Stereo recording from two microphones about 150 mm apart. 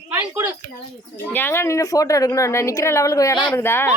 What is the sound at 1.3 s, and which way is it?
A child's voice, 15° left (ahead or behind).